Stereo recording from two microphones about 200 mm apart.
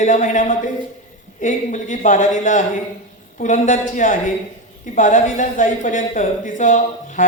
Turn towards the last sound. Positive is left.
turn(degrees=40)  # may be behind; listen again after turning